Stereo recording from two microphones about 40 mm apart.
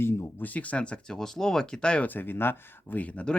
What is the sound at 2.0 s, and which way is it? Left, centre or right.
Speech, left.